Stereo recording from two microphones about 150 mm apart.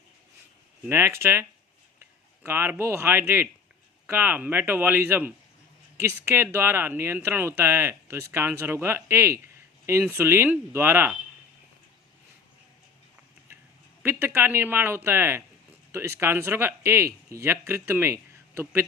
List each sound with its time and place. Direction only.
0.9 s speech: 15° right (ahead or behind)
14.0 s speech: 15° right (ahead or behind)